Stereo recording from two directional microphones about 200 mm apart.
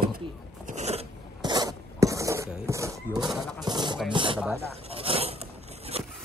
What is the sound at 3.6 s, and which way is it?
Speech, 20° right (ahead or behind).